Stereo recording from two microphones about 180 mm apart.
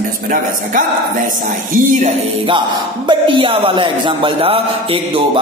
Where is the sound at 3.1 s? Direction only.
25° right (ahead or behind).